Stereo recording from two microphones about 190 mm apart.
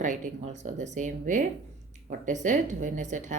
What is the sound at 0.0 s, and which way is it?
A woman's voice, 40° right (ahead or behind).